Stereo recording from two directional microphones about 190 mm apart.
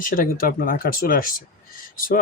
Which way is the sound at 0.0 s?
45° left (ahead or behind).